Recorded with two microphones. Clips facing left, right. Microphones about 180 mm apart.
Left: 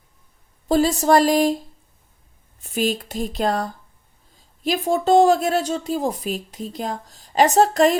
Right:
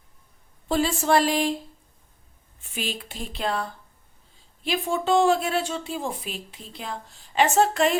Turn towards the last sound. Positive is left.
turn(degrees=40)  # may be behind; listen again after turning